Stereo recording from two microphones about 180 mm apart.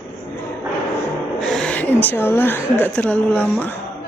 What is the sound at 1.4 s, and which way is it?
Speech, centre (ahead or behind).